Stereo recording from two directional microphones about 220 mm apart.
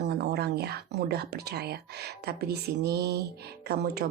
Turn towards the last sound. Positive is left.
turn(degrees=-45)  # may be behind; listen again after turning